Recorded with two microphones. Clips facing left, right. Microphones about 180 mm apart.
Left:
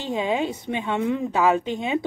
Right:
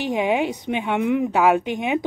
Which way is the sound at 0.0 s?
15° right (ahead or behind).